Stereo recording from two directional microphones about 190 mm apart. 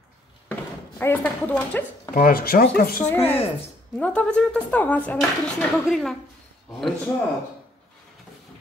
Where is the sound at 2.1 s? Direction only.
50° left (ahead or behind).